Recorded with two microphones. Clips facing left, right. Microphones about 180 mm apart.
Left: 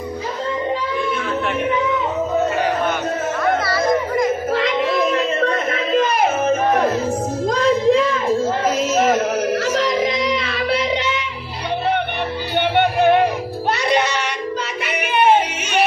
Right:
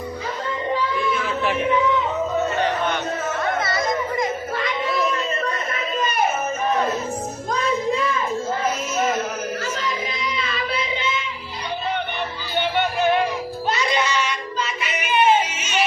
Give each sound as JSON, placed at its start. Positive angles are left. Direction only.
{"t": 3.6, "sound": "chatter", "side_deg": -20}
{"t": 4.5, "sound": "music", "side_deg": 85}
{"t": 7.4, "sound": "a sound", "side_deg": 90}
{"t": 9.5, "sound": "music", "side_deg": 85}
{"t": 12.5, "sound": "music", "side_deg": 60}
{"t": 13.7, "sound": "child singing", "side_deg": 60}
{"t": 14.8, "sound": "music", "side_deg": 60}